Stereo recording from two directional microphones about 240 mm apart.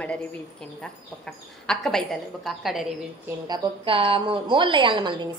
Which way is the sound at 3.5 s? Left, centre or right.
Centre.